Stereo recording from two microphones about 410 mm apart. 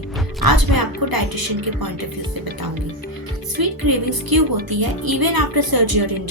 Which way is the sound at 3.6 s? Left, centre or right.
Right.